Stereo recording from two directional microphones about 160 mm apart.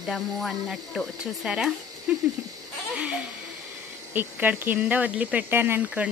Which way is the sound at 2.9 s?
5° right (ahead or behind).